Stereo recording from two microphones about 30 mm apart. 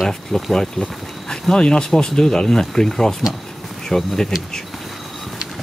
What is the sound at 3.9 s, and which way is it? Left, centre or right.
Speech, centre.